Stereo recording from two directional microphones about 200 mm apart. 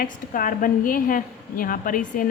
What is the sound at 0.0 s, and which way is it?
A woman's voice, 45° left (ahead or behind).